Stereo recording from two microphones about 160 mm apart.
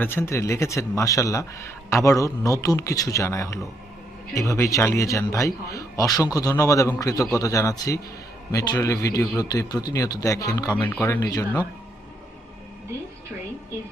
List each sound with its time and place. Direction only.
0.0 s a man's voice: 15° left (ahead or behind)